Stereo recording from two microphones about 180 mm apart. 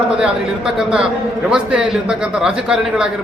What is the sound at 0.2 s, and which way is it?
A man's voice, 5° right (ahead or behind).